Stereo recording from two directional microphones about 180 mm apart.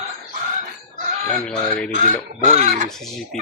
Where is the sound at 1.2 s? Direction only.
5° left (ahead or behind).